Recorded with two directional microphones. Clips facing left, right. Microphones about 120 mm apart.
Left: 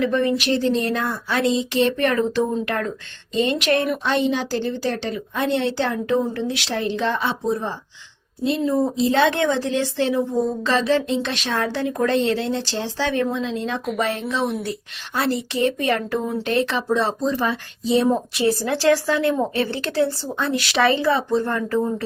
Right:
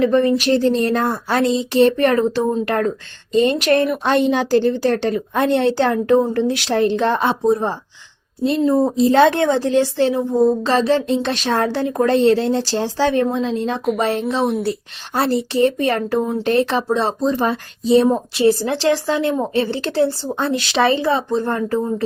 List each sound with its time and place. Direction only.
0.0 s a woman's voice: 35° right (ahead or behind)
4.0 s a woman's voice: 50° right (ahead or behind)
18.3 s speech: 30° right (ahead or behind)